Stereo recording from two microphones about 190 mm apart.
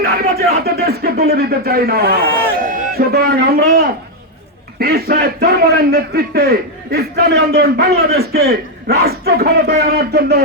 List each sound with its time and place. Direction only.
0.0 s a man's voice: 55° right (ahead or behind)